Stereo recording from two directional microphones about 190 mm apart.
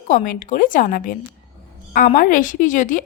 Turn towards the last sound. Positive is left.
turn(degrees=45)  # may be behind; listen again after turning